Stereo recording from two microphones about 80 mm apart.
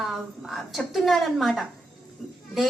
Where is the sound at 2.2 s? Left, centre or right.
Centre.